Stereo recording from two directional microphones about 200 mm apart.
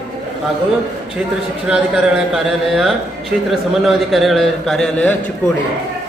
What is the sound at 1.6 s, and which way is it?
A man's voice, 5° right (ahead or behind).